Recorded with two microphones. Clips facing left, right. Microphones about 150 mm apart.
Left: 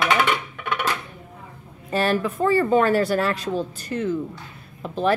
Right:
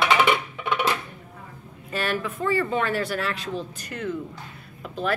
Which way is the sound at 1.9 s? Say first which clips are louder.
Left 6 dB; 35° left (ahead or behind).